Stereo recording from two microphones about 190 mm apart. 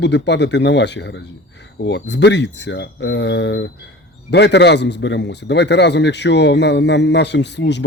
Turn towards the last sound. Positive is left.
turn(degrees=65)  # may be behind; listen again after turning